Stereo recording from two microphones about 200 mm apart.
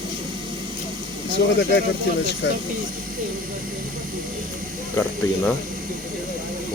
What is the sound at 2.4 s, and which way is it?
Speech, 60° left (ahead or behind).